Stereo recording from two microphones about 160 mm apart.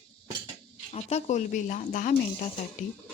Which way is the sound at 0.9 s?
45° left (ahead or behind).